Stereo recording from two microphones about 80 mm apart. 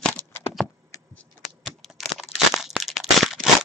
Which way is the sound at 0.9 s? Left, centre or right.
Left.